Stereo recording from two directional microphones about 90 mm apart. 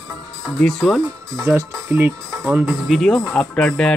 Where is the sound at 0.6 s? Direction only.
5° left (ahead or behind).